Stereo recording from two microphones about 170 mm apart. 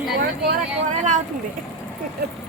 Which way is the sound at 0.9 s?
45° right (ahead or behind).